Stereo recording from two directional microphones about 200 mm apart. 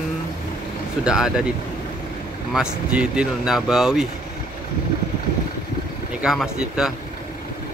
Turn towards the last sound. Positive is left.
turn(degrees=-5)  # may be behind; listen again after turning